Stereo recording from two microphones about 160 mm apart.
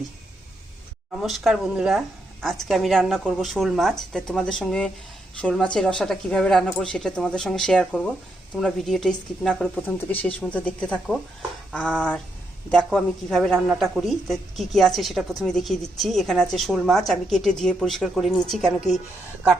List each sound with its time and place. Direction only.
1.2 s speech: centre (ahead or behind)